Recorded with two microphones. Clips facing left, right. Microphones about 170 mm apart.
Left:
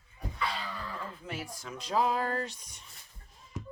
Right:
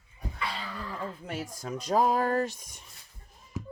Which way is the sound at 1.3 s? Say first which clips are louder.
Right 4 dB; 40° right (ahead or behind).